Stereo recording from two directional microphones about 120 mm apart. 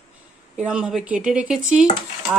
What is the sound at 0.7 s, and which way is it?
Speech, 5° right (ahead or behind).